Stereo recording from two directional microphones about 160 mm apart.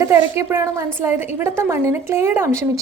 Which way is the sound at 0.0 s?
15° right (ahead or behind).